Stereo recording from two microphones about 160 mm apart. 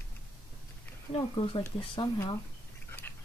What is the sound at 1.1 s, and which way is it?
Speech, 30° left (ahead or behind).